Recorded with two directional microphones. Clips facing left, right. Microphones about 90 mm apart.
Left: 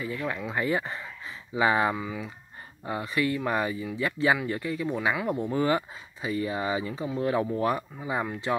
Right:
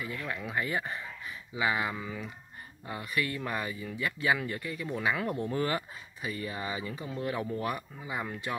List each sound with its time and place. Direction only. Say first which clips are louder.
0.0 s speech: left 5 dB; 30° left (ahead or behind)